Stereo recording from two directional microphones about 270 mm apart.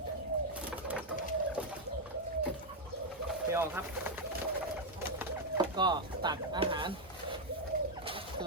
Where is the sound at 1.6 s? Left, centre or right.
Centre.